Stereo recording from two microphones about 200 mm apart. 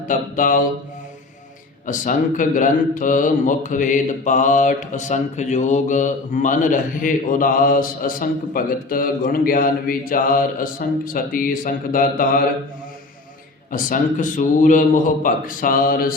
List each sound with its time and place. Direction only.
0.1 s speech: 40° left (ahead or behind)
1.9 s speech: 40° left (ahead or behind)
13.7 s speech: 40° left (ahead or behind)